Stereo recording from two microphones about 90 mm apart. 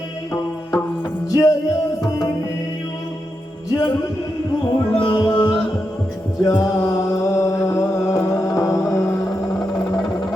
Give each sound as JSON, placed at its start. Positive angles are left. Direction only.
{"t": 1.3, "sound": "music", "side_deg": 35}
{"t": 3.7, "sound": "music", "side_deg": 50}
{"t": 4.9, "sound": "music", "side_deg": 65}
{"t": 5.3, "sound": "music", "side_deg": 15}
{"t": 6.4, "sound": "mantra", "side_deg": 40}